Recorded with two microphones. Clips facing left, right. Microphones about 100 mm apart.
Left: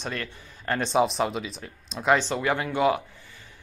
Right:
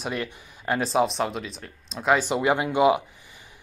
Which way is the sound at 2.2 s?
15° right (ahead or behind).